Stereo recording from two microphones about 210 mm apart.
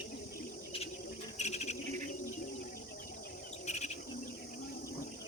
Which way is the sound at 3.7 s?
30° left (ahead or behind).